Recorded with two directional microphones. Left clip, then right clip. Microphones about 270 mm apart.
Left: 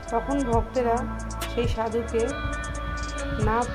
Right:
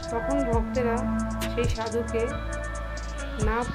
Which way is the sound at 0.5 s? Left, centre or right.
Centre.